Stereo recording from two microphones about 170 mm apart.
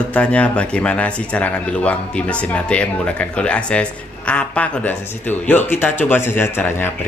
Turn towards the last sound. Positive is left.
turn(degrees=15)  # may be behind; listen again after turning